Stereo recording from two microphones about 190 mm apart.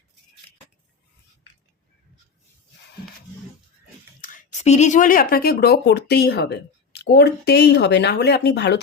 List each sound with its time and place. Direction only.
4.2 s speech: 40° left (ahead or behind); by 8.8 s 60° left (ahead or behind)